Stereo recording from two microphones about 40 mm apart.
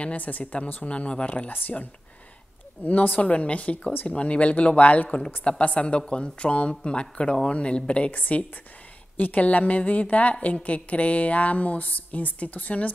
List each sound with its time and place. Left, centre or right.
0.0 s a woman's voice: left
8.1 s a woman's voice: left